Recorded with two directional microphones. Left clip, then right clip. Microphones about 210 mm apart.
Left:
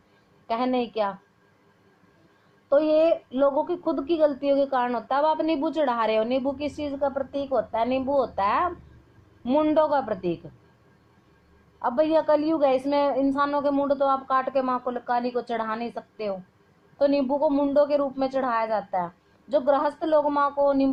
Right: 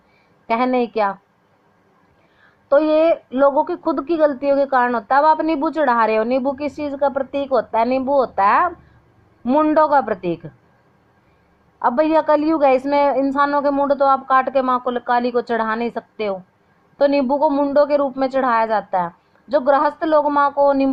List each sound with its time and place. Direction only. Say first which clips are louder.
0.4 s a woman's voice: right 7 dB; 25° right (ahead or behind)
2.6 s a woman's voice: right 6 dB; 25° right (ahead or behind)
11.8 s a woman's voice: right 6 dB; 25° right (ahead or behind)